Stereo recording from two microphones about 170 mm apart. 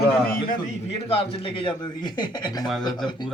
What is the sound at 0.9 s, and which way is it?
A man's voice, 35° left (ahead or behind).